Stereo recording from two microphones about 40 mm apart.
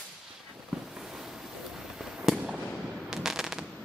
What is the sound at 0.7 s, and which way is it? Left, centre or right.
Fireworks, centre.